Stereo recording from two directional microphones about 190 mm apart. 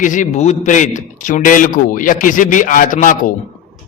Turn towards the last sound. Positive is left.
turn(degrees=45)  # may be behind; listen again after turning